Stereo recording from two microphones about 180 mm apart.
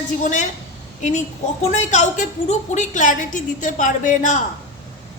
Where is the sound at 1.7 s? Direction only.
40° left (ahead or behind).